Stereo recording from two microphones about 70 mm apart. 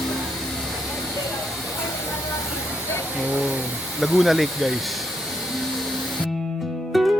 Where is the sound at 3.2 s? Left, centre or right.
Right.